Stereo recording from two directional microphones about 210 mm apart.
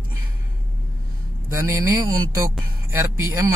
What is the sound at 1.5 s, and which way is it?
Speech, 15° right (ahead or behind).